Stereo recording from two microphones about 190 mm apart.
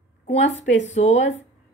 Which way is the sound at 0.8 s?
35° left (ahead or behind).